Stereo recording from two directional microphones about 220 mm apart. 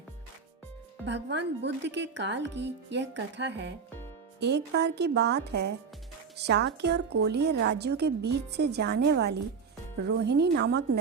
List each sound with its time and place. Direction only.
1.0 s speech: 55° right (ahead or behind)